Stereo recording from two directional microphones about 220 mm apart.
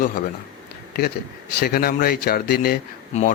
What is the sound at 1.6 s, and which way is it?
Speech, 45° left (ahead or behind).